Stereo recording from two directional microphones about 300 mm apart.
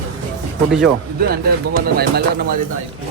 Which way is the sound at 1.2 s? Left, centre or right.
Right.